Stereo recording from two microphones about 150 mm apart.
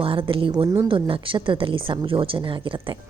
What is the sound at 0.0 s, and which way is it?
A woman's voice, 35° right (ahead or behind).